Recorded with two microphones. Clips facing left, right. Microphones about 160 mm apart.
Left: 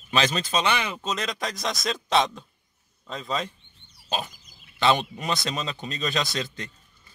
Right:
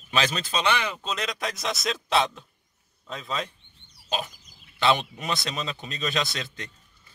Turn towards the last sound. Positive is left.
turn(degrees=0)  # may be behind; listen again after turning